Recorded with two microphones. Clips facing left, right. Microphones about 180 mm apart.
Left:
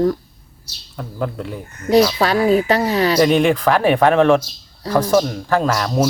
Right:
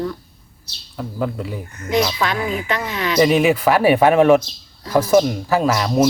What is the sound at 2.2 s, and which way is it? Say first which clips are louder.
Speech: left 7 dB; 35° left (ahead or behind).